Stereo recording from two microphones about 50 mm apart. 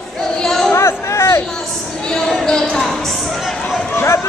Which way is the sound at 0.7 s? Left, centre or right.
Left.